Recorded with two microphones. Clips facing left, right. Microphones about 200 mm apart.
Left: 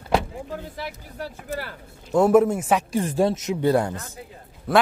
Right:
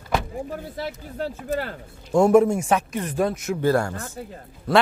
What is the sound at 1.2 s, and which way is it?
Speech, 45° right (ahead or behind).